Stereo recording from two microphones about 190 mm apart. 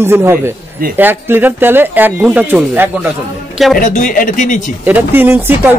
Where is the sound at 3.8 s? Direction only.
45° left (ahead or behind).